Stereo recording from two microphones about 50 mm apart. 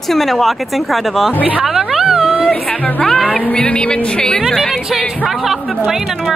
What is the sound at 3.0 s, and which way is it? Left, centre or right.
Music, centre.